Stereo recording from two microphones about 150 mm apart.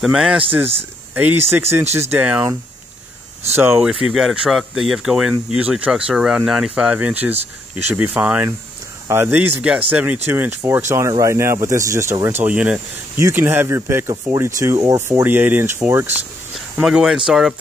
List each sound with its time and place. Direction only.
0.0 s speech: 5° right (ahead or behind)
3.5 s speech: 15° right (ahead or behind)
3.8 s speech: 5° right (ahead or behind)